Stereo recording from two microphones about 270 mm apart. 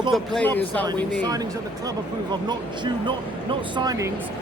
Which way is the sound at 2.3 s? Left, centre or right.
Centre.